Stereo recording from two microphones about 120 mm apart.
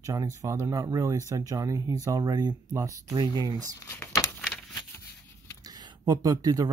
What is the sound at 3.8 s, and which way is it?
Crumpling, 25° left (ahead or behind).